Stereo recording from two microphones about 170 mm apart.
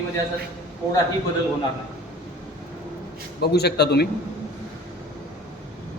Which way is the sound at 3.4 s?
70° left (ahead or behind).